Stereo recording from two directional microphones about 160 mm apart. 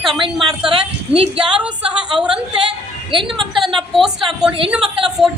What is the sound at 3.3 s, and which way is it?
A woman's voice, centre (ahead or behind).